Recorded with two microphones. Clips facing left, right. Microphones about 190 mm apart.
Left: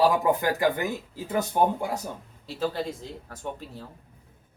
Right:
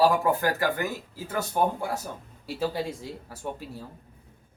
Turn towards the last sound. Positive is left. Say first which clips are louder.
# right 1 dB
turn(degrees=-10)  # may be behind; listen again after turning